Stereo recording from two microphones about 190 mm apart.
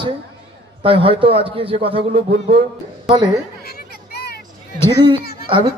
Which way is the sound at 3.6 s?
55° left (ahead or behind).